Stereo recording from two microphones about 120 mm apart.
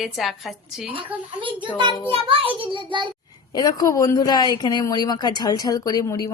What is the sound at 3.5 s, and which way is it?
A woman's voice, 30° left (ahead or behind).